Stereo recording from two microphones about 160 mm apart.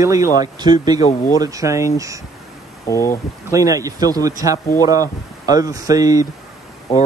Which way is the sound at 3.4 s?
20° right (ahead or behind).